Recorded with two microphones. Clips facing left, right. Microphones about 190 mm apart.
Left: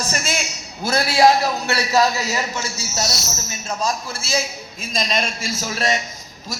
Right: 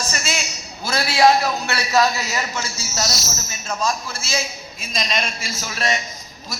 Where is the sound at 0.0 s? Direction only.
50° left (ahead or behind).